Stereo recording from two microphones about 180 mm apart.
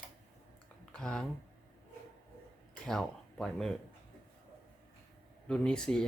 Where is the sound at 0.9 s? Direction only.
5° left (ahead or behind).